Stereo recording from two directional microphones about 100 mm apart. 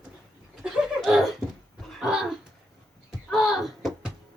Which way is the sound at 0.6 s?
Centre (ahead or behind).